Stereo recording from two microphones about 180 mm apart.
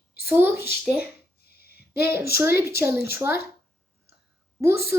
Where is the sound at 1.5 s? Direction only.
60° left (ahead or behind).